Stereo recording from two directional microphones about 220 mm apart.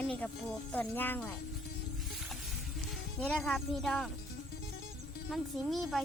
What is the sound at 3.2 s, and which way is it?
Speech, 5° left (ahead or behind).